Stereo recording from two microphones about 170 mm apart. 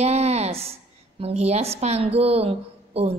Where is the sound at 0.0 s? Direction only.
40° right (ahead or behind).